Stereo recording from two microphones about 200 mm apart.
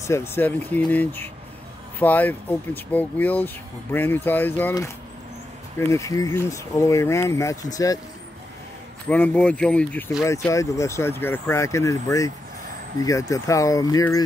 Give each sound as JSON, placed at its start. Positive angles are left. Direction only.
{"t": 0.0, "sound": "speech", "side_deg": 15}
{"t": 9.1, "sound": "speech", "side_deg": 10}